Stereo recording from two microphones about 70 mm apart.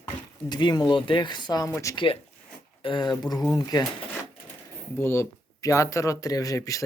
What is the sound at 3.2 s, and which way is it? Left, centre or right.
Speech, left.